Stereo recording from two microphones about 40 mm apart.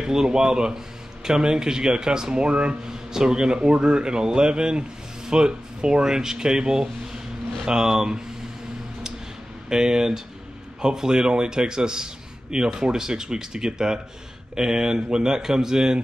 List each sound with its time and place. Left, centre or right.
0.0 s a man's voice: centre
2.9 s a man's voice: centre
9.7 s a man's voice: centre